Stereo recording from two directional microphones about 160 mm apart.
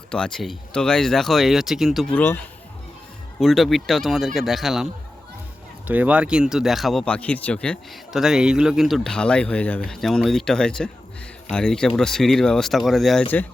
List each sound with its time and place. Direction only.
0.1 s speech: 5° left (ahead or behind)
2.1 s speech: 10° left (ahead or behind)
3.4 s speech: centre (ahead or behind)
5.9 s speech: 10° right (ahead or behind)